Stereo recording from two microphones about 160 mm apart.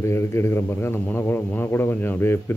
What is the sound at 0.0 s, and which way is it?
Speech, 15° left (ahead or behind).